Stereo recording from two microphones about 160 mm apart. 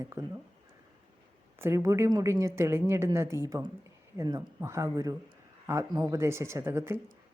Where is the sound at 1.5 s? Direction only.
15° right (ahead or behind).